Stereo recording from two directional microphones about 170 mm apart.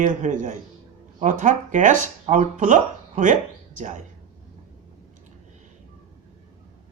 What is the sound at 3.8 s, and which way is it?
Speech, 45° right (ahead or behind).